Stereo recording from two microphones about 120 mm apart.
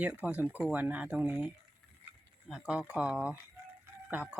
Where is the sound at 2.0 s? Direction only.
15° right (ahead or behind).